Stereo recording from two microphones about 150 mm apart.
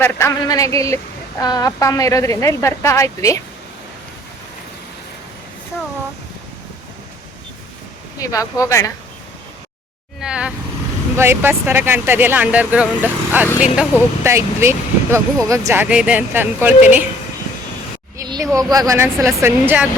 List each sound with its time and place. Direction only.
0.0 s a woman's voice: 20° left (ahead or behind)
8.2 s a woman's voice: 20° left (ahead or behind)
10.2 s speech: 5° right (ahead or behind)
18.2 s speech: 25° right (ahead or behind)